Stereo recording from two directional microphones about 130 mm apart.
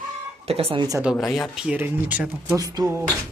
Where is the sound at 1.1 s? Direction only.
5° left (ahead or behind).